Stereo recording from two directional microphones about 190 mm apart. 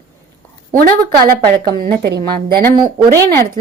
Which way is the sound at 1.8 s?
55° right (ahead or behind).